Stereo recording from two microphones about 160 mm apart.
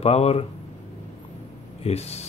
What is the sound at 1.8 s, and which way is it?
Speech, 40° left (ahead or behind).